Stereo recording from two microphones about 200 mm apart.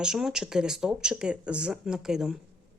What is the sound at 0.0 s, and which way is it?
Speech, centre (ahead or behind).